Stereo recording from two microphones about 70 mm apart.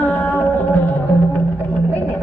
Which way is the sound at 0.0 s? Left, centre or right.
Left.